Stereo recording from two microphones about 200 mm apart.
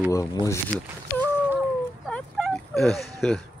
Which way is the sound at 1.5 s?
Centre (ahead or behind).